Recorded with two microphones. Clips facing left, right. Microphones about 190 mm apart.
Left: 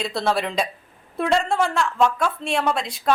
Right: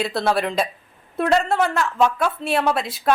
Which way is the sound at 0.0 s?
Centre (ahead or behind).